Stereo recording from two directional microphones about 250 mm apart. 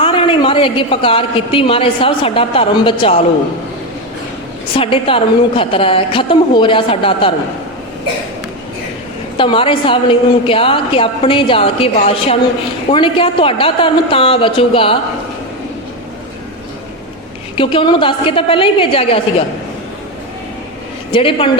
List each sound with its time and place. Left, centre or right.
0.0 s a woman's voice: left
4.8 s a woman's voice: left
9.4 s a woman's voice: left
17.6 s a woman's voice: left
21.1 s a woman's voice: left